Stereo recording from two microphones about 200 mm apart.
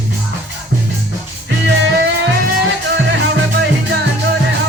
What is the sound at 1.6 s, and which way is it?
Music, 60° right (ahead or behind).